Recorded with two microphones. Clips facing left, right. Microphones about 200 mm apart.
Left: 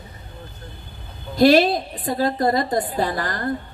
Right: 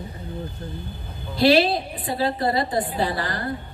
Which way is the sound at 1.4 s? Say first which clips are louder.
Left 3 dB; 45° left (ahead or behind).